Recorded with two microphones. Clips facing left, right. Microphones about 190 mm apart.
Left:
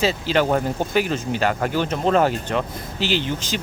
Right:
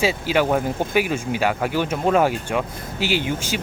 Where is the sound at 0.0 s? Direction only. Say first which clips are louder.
Even; 10° right (ahead or behind).